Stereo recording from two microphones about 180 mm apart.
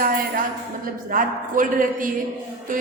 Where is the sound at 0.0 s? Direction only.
50° right (ahead or behind).